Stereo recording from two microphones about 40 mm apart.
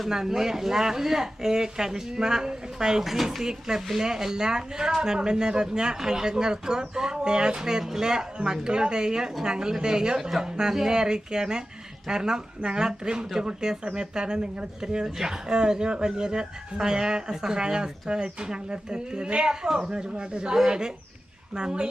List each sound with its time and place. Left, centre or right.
0.1 s speech: centre
10.2 s speech: centre; by 19.5 s right
19.6 s speech: centre
19.9 s speech: right